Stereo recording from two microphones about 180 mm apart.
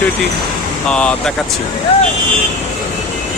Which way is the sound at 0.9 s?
5° left (ahead or behind).